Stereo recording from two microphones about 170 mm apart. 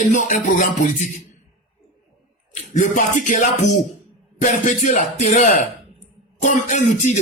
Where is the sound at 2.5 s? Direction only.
50° left (ahead or behind).